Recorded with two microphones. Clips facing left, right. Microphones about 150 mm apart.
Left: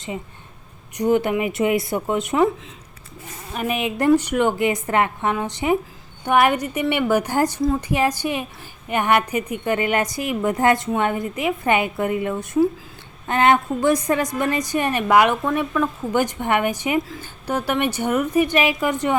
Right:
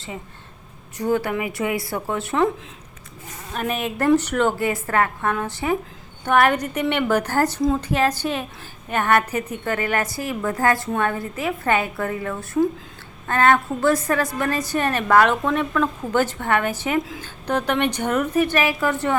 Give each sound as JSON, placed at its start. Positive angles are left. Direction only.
{"t": 0.9, "sound": "a woman's voice", "side_deg": 20}
{"t": 3.5, "sound": "a woman's voice", "side_deg": 10}